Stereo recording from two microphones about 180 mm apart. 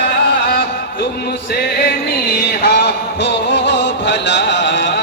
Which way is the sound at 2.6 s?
70° left (ahead or behind).